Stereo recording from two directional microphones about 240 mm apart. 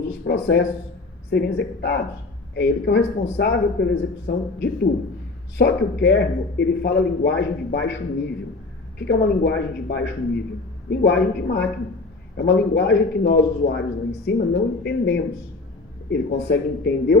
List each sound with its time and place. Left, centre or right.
0.1 s a man's voice: left
9.0 s a man's voice: left